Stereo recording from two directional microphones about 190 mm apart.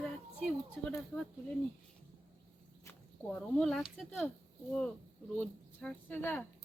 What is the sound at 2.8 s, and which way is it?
Speech, 10° left (ahead or behind).